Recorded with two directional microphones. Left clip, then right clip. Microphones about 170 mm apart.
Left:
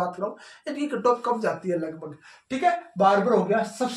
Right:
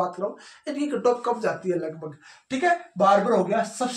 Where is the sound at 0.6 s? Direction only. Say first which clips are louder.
Even; 10° left (ahead or behind).